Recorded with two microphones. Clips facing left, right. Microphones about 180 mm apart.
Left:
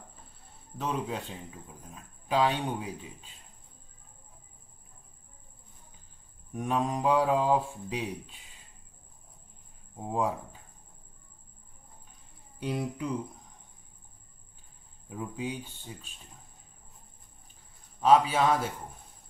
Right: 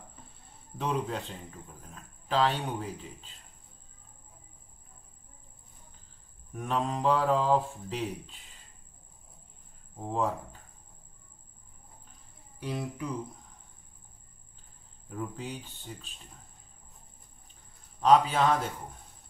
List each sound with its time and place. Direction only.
0.7 s a man's voice: centre (ahead or behind)
6.5 s a man's voice: 15° left (ahead or behind)
10.0 s a man's voice: 10° left (ahead or behind)
12.6 s speech: 20° left (ahead or behind)
15.0 s a man's voice: 10° left (ahead or behind)
18.0 s a man's voice: 5° left (ahead or behind)